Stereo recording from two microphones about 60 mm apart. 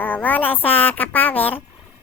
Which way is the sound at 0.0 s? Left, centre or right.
Left.